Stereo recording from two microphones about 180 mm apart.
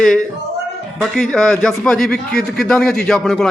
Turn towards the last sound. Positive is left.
turn(degrees=5)  # may be behind; listen again after turning